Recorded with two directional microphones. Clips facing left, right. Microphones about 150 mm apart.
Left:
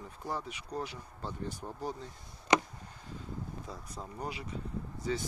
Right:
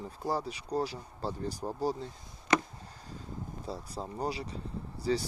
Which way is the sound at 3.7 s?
30° right (ahead or behind).